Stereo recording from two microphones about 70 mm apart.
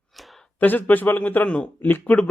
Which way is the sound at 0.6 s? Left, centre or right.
Left.